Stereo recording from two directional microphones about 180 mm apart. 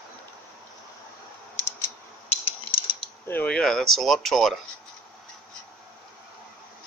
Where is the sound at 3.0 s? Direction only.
10° left (ahead or behind).